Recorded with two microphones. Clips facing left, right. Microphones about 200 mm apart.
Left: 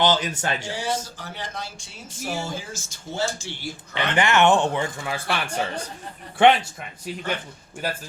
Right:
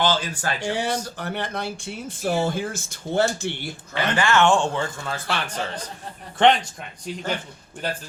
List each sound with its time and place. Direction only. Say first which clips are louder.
0.0 s speech: left 1 dB; 20° left (ahead or behind)
0.7 s speech: right 3 dB; 60° right (ahead or behind)
3.9 s speech: even; 20° left (ahead or behind)